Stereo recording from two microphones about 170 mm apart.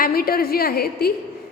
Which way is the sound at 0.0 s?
60° left (ahead or behind).